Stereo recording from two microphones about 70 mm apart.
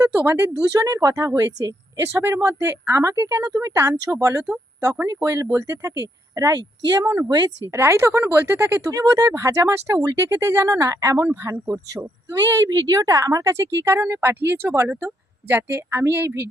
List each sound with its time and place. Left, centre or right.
0.3 s speech: right
7.7 s speech: right